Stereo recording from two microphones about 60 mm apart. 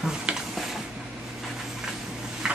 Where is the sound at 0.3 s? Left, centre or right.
Centre.